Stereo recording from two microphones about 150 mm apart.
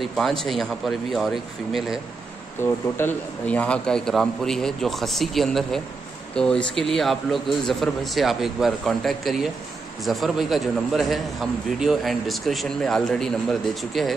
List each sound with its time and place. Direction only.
0.0 s a man's voice: centre (ahead or behind)
2.6 s a man's voice: 15° left (ahead or behind); by 14.1 s centre (ahead or behind)